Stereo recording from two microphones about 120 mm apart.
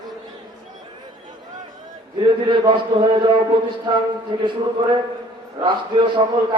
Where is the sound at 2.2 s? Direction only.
45° right (ahead or behind).